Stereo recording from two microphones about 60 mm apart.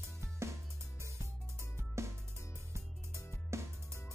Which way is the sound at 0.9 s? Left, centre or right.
Right.